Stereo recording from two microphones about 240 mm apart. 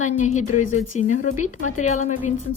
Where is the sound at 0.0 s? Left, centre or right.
Left.